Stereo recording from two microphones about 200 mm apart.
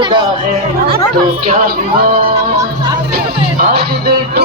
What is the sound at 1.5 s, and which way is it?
Speech, 45° right (ahead or behind).